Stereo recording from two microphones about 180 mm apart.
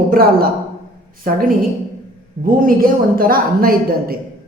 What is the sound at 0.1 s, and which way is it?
Speech, 55° right (ahead or behind).